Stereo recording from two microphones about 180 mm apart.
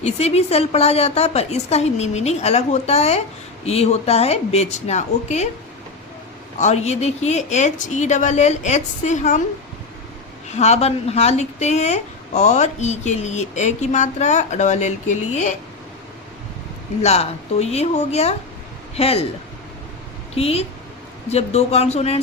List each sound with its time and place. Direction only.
0.0 s speech: 35° left (ahead or behind)
6.6 s speech: 40° left (ahead or behind)
10.5 s speech: 35° left (ahead or behind)
17.0 s speech: 35° left (ahead or behind)
20.3 s speech: 35° left (ahead or behind)